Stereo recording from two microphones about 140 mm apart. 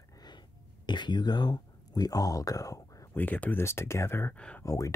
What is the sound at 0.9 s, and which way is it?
Speech, 35° left (ahead or behind).